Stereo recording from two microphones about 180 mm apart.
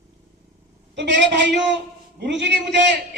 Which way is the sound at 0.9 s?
75° right (ahead or behind).